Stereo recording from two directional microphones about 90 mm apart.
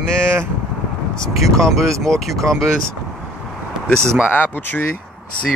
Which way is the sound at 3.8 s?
10° left (ahead or behind).